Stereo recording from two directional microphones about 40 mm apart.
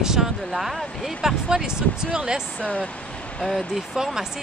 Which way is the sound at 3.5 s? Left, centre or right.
Centre.